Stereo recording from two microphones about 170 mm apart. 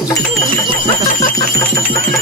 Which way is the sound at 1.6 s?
15° left (ahead or behind).